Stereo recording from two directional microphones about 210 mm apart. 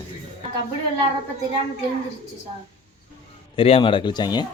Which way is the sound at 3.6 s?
25° left (ahead or behind).